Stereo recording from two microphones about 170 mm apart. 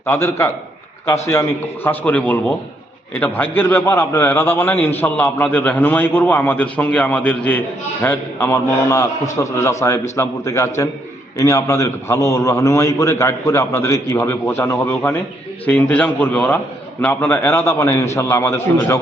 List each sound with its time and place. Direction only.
0.0 s a man's voice: 15° left (ahead or behind)